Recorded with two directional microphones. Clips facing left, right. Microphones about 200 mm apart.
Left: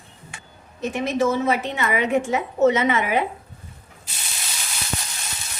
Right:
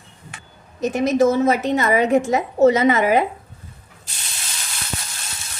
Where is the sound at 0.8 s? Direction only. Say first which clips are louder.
Right 5 dB; 40° right (ahead or behind).